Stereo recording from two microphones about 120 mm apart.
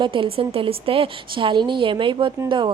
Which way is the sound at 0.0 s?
45° right (ahead or behind).